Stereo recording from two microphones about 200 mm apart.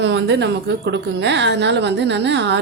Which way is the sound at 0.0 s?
60° right (ahead or behind).